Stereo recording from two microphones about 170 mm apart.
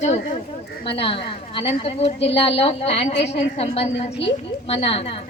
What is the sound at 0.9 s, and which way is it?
A woman's voice, 30° left (ahead or behind).